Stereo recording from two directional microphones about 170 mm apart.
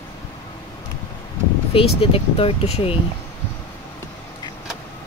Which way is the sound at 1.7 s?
35° left (ahead or behind).